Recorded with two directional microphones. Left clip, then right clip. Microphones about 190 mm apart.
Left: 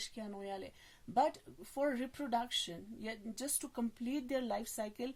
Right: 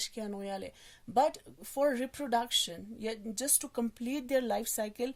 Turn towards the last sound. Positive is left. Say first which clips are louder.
# right 7 dB
turn(degrees=-45)  # may be behind; listen again after turning